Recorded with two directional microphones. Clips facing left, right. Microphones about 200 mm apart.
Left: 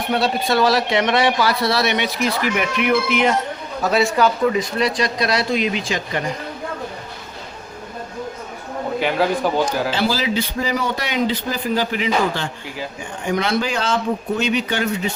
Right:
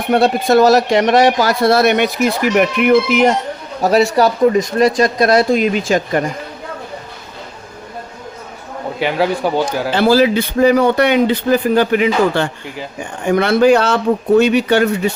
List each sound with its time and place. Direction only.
0.1 s speech: 50° right (ahead or behind)
3.8 s speech: 40° right (ahead or behind)
9.0 s speech: 5° right (ahead or behind)
9.9 s speech: 55° right (ahead or behind)